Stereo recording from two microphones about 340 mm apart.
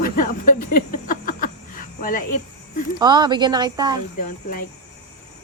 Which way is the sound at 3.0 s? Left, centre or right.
Centre.